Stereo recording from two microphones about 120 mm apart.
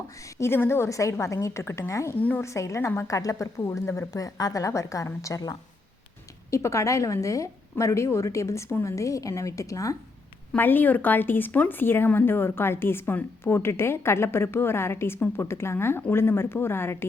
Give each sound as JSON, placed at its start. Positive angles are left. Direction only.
{"t": 0.3, "sound": "speech", "side_deg": 20}
{"t": 10.5, "sound": "speech", "side_deg": 15}